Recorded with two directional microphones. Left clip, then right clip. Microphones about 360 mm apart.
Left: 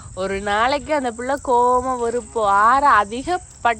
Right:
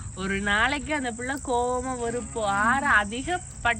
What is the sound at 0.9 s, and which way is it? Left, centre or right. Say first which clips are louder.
Speech: left 8 dB; left.